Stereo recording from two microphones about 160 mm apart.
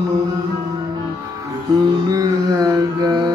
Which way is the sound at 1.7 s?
25° right (ahead or behind).